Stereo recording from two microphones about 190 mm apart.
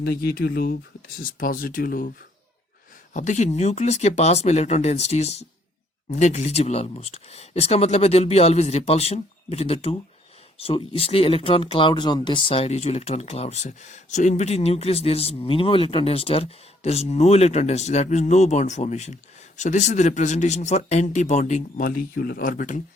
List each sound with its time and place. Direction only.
0.0 s speech: 55° left (ahead or behind)
3.1 s speech: 40° left (ahead or behind)